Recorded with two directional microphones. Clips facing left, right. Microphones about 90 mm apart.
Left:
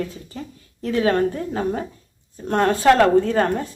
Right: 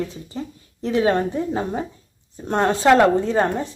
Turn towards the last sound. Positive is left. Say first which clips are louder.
# even
turn(degrees=-20)  # may be behind; listen again after turning